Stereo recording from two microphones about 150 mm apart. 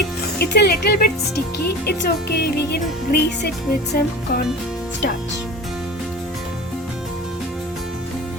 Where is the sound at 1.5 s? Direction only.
90° left.